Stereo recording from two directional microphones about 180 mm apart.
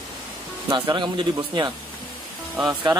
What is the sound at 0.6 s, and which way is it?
Speech, 25° right (ahead or behind).